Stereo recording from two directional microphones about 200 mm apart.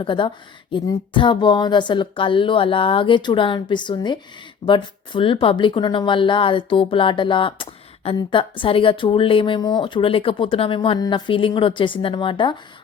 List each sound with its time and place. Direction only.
0.0 s speech: 25° left (ahead or behind)